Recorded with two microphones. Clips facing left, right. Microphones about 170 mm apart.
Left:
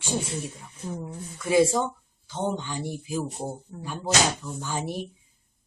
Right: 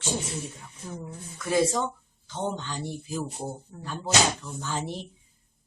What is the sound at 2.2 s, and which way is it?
A woman's voice, 10° left (ahead or behind).